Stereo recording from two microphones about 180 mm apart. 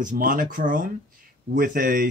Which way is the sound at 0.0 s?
50° right (ahead or behind).